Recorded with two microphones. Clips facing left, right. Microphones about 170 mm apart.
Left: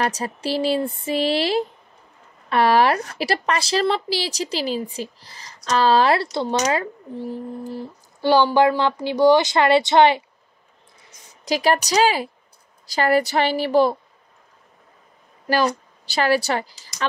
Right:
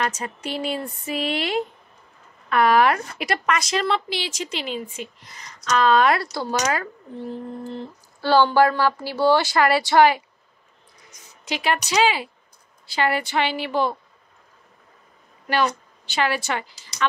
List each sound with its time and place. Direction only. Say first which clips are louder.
0.0 s speech: left 3 dB; 35° left (ahead or behind)
7.2 s speech: left 1 dB; 10° left (ahead or behind)
11.1 s speech: left 7 dB; 35° left (ahead or behind)
15.4 s a woman's voice: left 2 dB; 35° left (ahead or behind)